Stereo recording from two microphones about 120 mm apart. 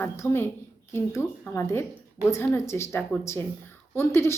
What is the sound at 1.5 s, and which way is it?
Speech, 20° left (ahead or behind).